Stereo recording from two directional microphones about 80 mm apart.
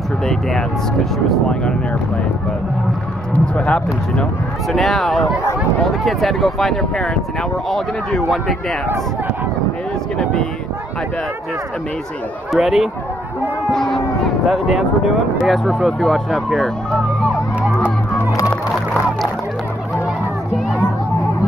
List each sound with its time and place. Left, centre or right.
0.3 s speech: centre
3.3 s speech: centre
4.6 s speech: centre
12.5 s speech: centre
13.7 s livestock: centre
14.7 s speech: centre